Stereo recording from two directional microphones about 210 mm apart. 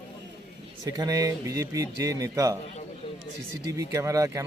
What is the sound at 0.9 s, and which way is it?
A man's voice, 15° right (ahead or behind).